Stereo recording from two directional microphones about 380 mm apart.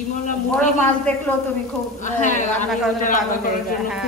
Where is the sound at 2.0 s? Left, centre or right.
Centre.